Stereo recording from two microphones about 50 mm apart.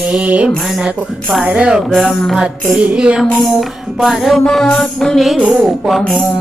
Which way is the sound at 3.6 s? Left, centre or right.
Centre.